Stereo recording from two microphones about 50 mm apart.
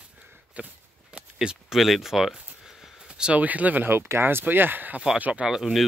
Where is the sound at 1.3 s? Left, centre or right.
Centre.